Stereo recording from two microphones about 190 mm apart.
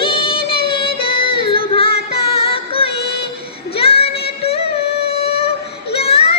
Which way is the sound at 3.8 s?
30° left (ahead or behind).